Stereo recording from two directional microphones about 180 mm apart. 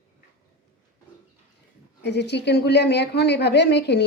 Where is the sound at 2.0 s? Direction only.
70° left (ahead or behind).